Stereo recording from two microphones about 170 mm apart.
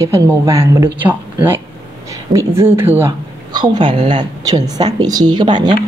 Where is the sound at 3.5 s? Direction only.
25° right (ahead or behind).